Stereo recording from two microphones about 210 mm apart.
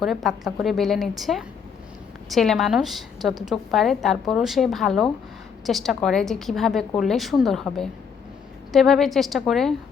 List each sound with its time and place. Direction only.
0.0 s a woman's voice: centre (ahead or behind)